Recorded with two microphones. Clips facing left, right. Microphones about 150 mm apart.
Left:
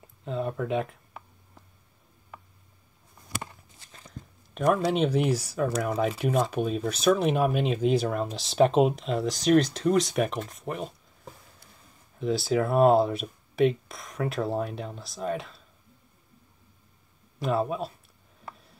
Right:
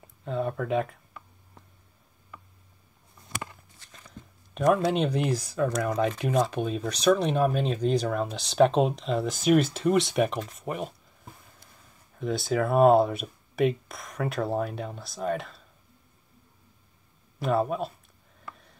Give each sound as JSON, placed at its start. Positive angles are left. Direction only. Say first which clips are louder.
{"t": 0.2, "sound": "speech", "louder": "right 1 dB", "side_deg": 0}
{"t": 4.6, "sound": "speech", "louder": "right 1 dB", "side_deg": 0}
{"t": 12.2, "sound": "speech", "louder": "left 1 dB", "side_deg": 0}
{"t": 17.4, "sound": "speech", "louder": "right 1 dB", "side_deg": 0}